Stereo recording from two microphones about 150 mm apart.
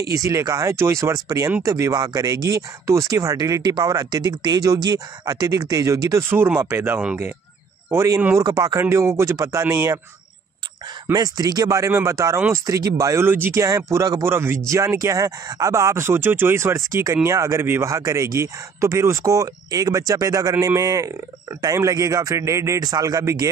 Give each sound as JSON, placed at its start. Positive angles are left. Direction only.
{"t": 0.1, "sound": "speech", "side_deg": -20}
{"t": 11.1, "sound": "speech", "side_deg": -25}